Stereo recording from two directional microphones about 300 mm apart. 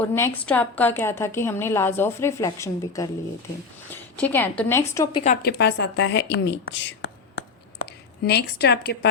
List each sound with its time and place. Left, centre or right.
0.0 s a woman's voice: centre
5.2 s a woman's voice: left